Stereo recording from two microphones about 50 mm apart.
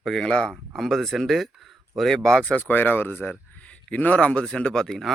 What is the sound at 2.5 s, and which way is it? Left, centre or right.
Speech, left.